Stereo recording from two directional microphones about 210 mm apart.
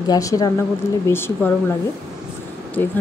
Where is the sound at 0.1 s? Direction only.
15° left (ahead or behind).